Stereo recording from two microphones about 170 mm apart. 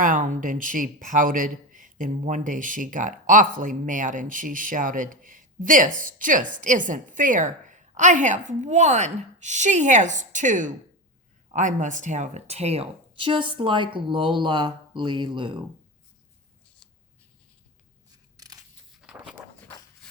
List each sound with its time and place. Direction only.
0.0 s a man's voice: 50° right (ahead or behind); by 15.5 s 25° right (ahead or behind)
18.3 s scissors: 20° right (ahead or behind)
19.0 s a sound: 5° right (ahead or behind)